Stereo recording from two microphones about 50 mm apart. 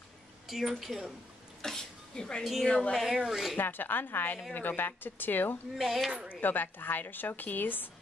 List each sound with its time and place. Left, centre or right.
0.5 s speech: centre
1.6 s a sound: centre
2.6 s speech: centre
2.9 s speech: centre
3.5 s a woman's voice: left
5.8 s speech: centre
6.4 s a woman's voice: left